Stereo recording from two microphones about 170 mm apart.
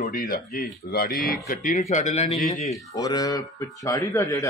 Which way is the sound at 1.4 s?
45° left (ahead or behind).